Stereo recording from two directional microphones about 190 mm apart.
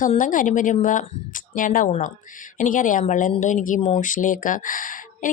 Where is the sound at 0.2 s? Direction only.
45° left (ahead or behind).